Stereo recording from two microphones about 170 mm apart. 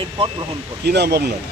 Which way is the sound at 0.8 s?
75° right (ahead or behind).